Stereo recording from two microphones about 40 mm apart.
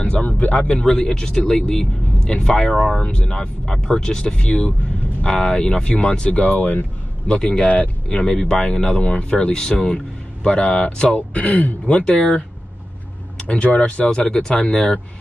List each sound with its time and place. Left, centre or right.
0.0 s a sound: left
0.3 s speech: left; by 3.0 s centre
3.0 s speech: left
3.3 s speech: centre
6.5 s speech: left
7.2 s speech: left
7.6 s speech: left
11.1 s speech: left
13.5 s speech: left; by 14.9 s centre